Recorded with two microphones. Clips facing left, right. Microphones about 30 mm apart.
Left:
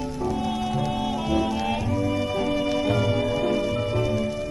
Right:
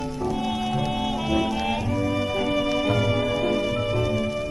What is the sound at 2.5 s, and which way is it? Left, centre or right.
Organ, right.